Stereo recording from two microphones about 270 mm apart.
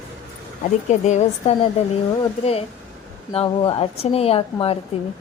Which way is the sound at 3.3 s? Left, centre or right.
Centre.